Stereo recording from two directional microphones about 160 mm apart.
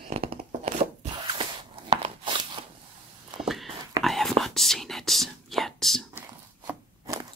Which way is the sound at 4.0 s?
Centre (ahead or behind).